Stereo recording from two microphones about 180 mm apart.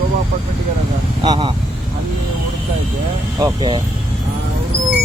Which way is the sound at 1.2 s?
25° right (ahead or behind).